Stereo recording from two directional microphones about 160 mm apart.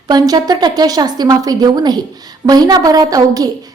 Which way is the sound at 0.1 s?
25° right (ahead or behind).